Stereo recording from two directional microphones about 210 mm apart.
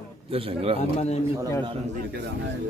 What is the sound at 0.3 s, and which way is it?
Speech, 25° right (ahead or behind).